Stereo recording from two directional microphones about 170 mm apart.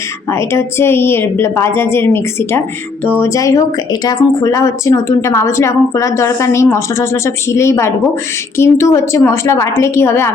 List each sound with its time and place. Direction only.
0.3 s a woman's voice: 15° left (ahead or behind)